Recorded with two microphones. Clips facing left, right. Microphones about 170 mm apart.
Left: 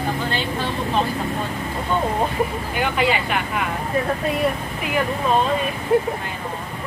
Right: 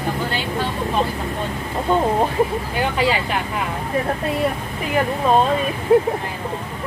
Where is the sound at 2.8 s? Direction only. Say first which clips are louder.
Even; 35° right (ahead or behind).